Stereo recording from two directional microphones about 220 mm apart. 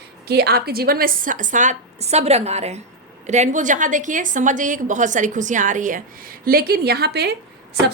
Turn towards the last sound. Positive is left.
turn(degrees=-50)  # may be behind; listen again after turning